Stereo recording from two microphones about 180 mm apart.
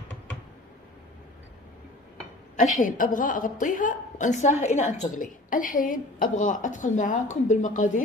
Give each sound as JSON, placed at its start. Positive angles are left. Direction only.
{"t": 2.5, "sound": "a woman's voice", "side_deg": 45}